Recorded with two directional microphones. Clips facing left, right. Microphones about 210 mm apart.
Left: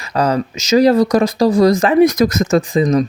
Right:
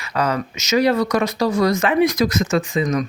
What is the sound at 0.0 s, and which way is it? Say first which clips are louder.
Speech: left 5 dB; 35° left (ahead or behind).